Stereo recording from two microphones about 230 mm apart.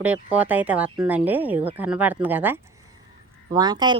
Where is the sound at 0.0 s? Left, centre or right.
Centre.